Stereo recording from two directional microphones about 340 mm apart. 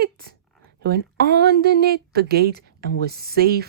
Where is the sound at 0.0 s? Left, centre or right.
Right.